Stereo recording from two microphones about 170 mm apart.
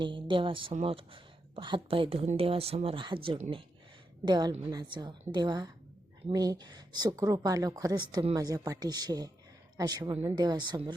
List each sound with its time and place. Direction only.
0.0 s speech: 30° right (ahead or behind)
4.3 s speech: 25° right (ahead or behind)